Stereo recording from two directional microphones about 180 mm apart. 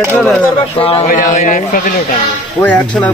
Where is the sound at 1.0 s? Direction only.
45° left (ahead or behind).